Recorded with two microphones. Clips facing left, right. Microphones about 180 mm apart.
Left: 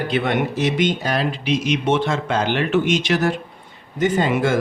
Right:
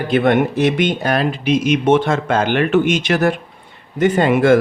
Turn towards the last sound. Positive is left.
turn(degrees=-60)  # may be behind; listen again after turning